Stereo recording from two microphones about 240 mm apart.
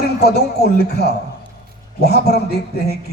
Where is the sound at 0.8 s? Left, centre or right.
Left.